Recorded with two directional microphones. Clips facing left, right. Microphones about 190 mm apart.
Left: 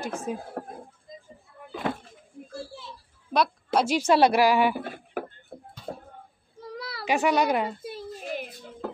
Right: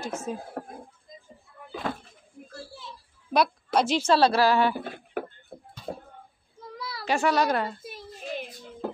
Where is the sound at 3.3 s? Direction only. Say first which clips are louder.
Even; 5° right (ahead or behind).